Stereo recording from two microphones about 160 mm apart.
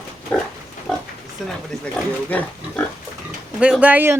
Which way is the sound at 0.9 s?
Centre (ahead or behind).